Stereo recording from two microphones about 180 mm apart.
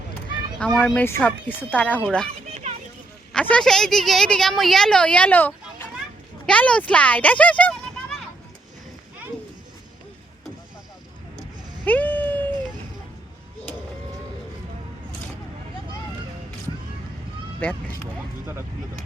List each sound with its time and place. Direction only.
0.6 s speech: centre (ahead or behind)
2.5 s a sound: 35° right (ahead or behind)
3.3 s a woman's voice: 5° left (ahead or behind)
11.9 s cat: 10° left (ahead or behind)
17.6 s vehicle: 10° left (ahead or behind)